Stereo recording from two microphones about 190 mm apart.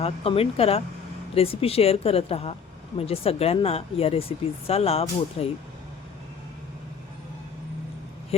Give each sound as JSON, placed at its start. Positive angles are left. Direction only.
{"t": 0.0, "sound": "speech", "side_deg": 30}
{"t": 8.3, "sound": "speech", "side_deg": 30}